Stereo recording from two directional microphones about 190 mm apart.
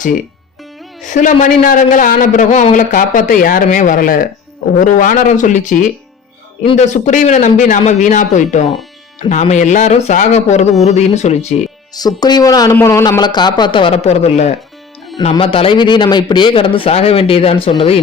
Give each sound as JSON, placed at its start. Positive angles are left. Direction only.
{"t": 1.0, "sound": "speech", "side_deg": 40}
{"t": 11.9, "sound": "speech", "side_deg": 20}